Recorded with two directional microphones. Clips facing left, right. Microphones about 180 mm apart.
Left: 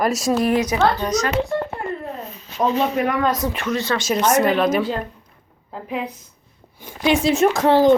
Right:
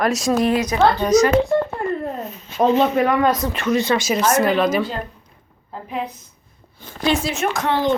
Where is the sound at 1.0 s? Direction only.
10° right (ahead or behind).